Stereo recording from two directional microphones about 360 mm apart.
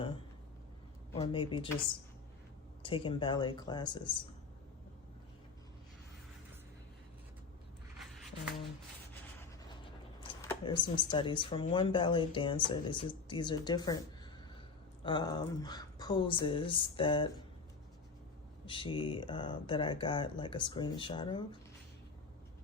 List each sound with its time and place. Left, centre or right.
1.1 s speech: centre
2.8 s speech: centre
7.9 s a sound: centre
10.2 s speech: centre
15.0 s speech: centre
18.6 s speech: centre